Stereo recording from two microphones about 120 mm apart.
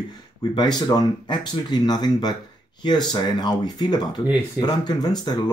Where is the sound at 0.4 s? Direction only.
35° left (ahead or behind).